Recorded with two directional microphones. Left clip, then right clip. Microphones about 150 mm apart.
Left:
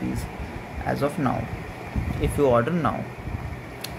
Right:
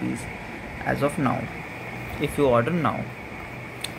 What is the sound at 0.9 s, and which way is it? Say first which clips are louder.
Speech: right 1 dB; 5° right (ahead or behind).